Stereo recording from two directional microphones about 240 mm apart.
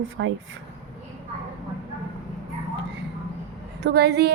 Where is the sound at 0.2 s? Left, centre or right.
Right.